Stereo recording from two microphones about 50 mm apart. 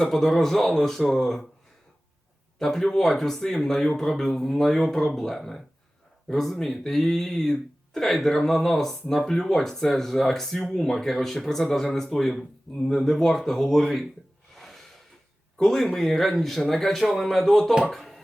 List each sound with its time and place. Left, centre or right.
0.0 s speech: centre
2.6 s speech: centre
14.5 s snort: centre
15.5 s speech: centre